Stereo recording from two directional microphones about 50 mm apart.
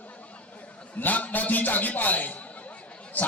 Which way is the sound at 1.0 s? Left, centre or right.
Left.